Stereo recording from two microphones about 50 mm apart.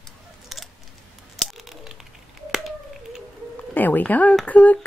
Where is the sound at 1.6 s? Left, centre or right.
Centre.